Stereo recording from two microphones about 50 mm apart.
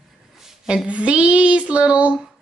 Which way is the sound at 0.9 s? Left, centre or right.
Right.